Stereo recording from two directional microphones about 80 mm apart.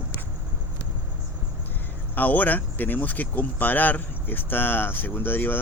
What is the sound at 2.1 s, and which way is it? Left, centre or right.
Speech, left.